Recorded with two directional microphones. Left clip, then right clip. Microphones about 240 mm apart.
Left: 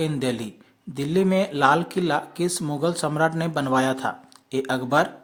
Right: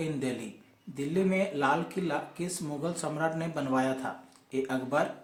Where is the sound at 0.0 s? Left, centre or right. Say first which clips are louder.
Left 8 dB; left.